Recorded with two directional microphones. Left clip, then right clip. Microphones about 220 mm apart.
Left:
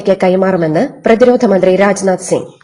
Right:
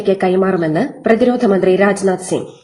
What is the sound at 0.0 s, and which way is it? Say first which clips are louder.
A woman's voice: left 4 dB; 30° left (ahead or behind).